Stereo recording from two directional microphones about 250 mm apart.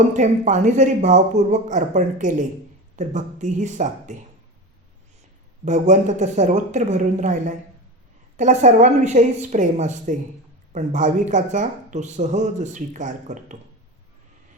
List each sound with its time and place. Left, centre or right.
0.1 s speech: right
5.6 s speech: right